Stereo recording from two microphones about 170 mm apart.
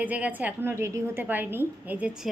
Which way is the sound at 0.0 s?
10° right (ahead or behind).